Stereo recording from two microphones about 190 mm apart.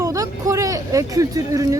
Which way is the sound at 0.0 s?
15° right (ahead or behind).